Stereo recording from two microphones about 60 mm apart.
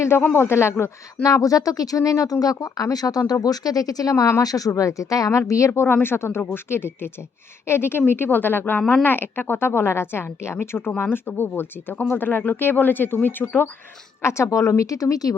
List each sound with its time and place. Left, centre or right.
0.0 s speech: left
1.2 s speech: left
5.5 s speech: left
5.9 s a woman's voice: left
13.4 s speech: centre
14.2 s speech: left
14.8 s speech: left